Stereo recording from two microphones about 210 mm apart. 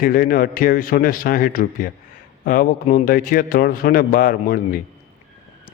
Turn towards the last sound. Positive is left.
turn(degrees=45)  # may be behind; listen again after turning